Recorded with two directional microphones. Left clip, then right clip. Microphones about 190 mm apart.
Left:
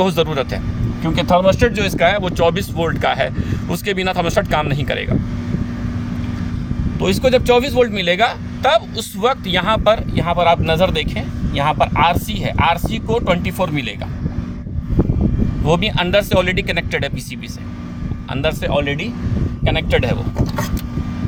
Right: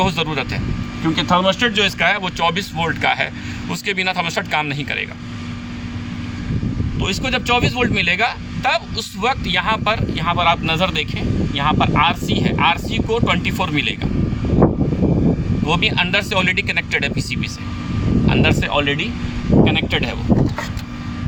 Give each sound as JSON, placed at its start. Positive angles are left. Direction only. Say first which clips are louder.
{"t": 0.0, "sound": "speech", "louder": "left 3 dB", "side_deg": 50}
{"t": 7.0, "sound": "speech", "louder": "left 6 dB", "side_deg": 50}
{"t": 15.6, "sound": "speech", "louder": "even", "side_deg": 50}
{"t": 18.3, "sound": "speech", "louder": "right 1 dB", "side_deg": 50}